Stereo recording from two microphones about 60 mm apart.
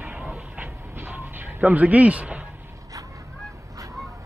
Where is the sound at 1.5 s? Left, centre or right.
Right.